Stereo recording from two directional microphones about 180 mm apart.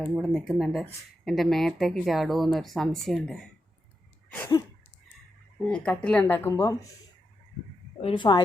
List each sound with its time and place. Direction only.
0.0 s speech: centre (ahead or behind)
5.6 s speech: 5° left (ahead or behind)
8.0 s speech: 25° left (ahead or behind)